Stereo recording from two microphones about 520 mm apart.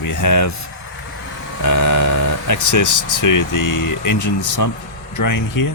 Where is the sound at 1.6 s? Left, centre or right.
Left.